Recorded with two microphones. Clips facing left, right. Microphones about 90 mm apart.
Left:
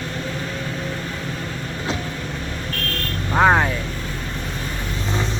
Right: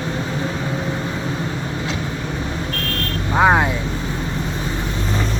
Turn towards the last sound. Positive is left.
turn(degrees=-10)  # may be behind; listen again after turning